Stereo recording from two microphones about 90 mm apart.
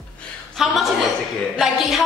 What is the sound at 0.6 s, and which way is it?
Speech, centre (ahead or behind).